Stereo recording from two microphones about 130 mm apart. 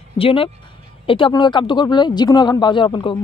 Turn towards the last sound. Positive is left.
turn(degrees=40)  # may be behind; listen again after turning